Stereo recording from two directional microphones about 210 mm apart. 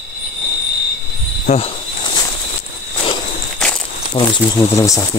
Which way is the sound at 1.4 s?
35° left (ahead or behind).